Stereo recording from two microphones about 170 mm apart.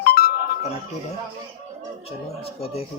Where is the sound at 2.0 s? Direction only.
35° left (ahead or behind).